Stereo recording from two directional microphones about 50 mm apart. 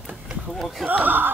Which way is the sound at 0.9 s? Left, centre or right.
Right.